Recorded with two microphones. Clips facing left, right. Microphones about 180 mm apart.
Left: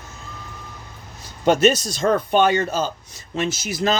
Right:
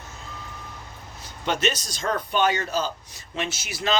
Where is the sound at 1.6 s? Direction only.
50° left (ahead or behind).